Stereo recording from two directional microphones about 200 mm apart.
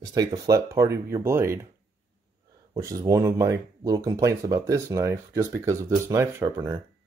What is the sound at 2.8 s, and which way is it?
Speech, 15° right (ahead or behind).